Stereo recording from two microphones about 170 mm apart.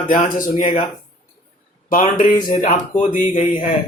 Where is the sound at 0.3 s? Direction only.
50° left (ahead or behind).